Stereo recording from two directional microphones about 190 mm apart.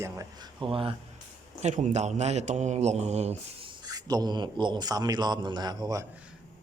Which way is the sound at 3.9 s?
20° right (ahead or behind).